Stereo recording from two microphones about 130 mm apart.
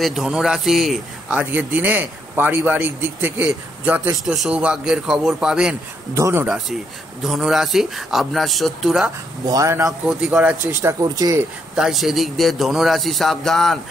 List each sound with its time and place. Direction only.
0.0 s a man's voice: centre (ahead or behind)
1.4 s a man's voice: 10° right (ahead or behind)
6.1 s speech: 20° right (ahead or behind)
7.2 s a man's voice: centre (ahead or behind)
9.5 s speech: 25° right (ahead or behind)
10.0 s a man's voice: 5° right (ahead or behind)
10.8 s speech: 25° right (ahead or behind)
11.7 s a man's voice: 5° right (ahead or behind)